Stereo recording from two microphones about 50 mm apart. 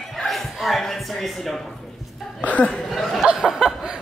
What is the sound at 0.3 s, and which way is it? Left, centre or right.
Chuckle, centre.